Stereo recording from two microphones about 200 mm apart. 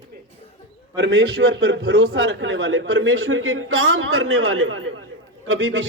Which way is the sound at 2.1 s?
80° right.